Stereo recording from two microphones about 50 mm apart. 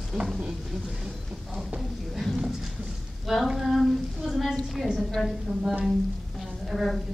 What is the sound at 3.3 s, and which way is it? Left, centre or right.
Speech, centre.